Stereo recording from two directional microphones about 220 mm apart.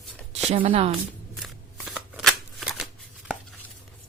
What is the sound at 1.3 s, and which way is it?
Shuffling cards, centre (ahead or behind).